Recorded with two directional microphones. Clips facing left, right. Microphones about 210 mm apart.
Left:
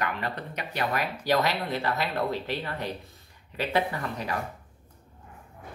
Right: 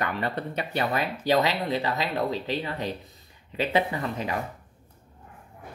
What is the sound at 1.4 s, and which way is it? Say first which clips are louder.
Speech: right 2 dB; 15° right (ahead or behind).